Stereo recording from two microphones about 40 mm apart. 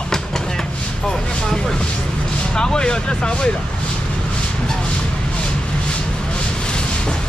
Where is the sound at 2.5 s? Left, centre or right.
Left.